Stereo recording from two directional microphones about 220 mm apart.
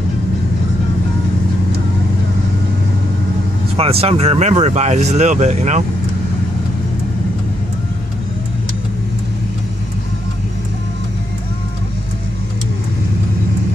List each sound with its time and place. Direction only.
3.7 s speech: 25° right (ahead or behind)